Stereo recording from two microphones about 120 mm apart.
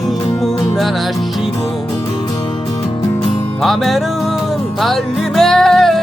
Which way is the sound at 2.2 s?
40° left (ahead or behind).